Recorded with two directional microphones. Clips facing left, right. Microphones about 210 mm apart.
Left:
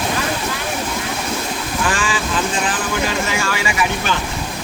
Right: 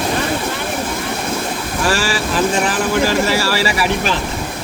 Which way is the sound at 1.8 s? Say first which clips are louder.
Right 4 dB; 40° right (ahead or behind).